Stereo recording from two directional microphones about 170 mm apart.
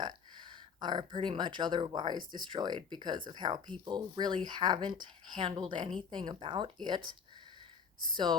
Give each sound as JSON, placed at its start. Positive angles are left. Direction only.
{"t": 0.8, "sound": "speech", "side_deg": -25}